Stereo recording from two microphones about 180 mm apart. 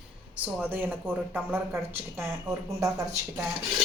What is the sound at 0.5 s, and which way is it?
Speech, 10° right (ahead or behind).